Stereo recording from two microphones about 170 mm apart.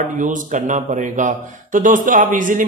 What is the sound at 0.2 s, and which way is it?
Speech, 45° right (ahead or behind).